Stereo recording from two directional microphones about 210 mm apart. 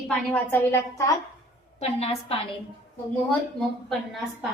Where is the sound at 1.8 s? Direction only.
30° left (ahead or behind).